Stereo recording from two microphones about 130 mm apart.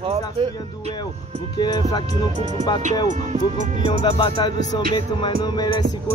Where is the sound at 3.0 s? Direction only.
75° right (ahead or behind).